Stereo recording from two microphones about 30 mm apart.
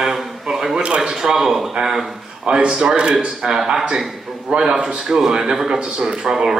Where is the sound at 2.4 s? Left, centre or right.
Right.